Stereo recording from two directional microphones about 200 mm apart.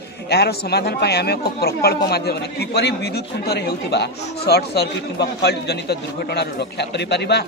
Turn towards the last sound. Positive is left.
turn(degrees=55)  # may be behind; listen again after turning